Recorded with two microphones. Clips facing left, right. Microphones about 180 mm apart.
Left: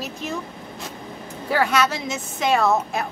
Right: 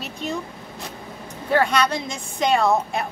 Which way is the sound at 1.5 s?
5° left (ahead or behind).